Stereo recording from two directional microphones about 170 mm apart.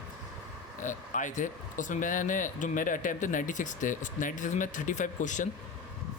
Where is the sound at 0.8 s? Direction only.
50° left (ahead or behind).